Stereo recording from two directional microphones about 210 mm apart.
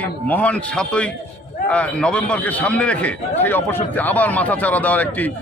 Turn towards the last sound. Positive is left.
turn(degrees=5)  # may be behind; listen again after turning